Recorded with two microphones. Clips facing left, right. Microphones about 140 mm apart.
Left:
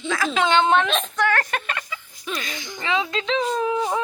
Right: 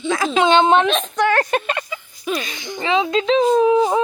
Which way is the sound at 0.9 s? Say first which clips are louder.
Right 5 dB; centre (ahead or behind).